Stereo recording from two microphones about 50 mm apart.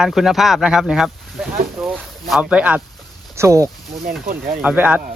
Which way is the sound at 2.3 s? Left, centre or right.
Centre.